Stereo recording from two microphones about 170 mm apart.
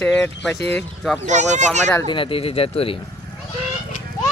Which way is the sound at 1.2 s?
45° right (ahead or behind).